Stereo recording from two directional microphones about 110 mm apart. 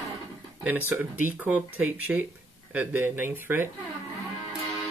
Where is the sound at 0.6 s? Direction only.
15° right (ahead or behind).